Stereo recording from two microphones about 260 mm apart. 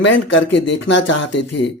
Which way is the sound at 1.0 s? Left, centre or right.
Left.